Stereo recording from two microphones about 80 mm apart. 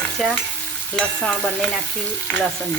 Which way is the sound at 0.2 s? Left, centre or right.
Centre.